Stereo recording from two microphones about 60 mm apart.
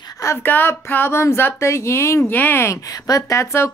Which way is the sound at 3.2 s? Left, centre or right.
Left.